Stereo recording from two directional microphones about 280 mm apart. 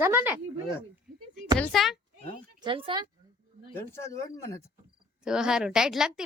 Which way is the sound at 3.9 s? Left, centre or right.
Centre.